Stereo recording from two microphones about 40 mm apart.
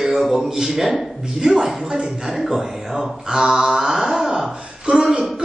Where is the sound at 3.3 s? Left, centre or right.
Centre.